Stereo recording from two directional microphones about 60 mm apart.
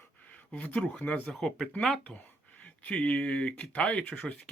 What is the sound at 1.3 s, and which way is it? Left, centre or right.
Speech, centre.